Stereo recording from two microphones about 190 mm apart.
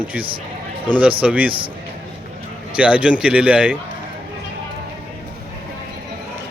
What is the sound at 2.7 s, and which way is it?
A man's voice, 5° right (ahead or behind).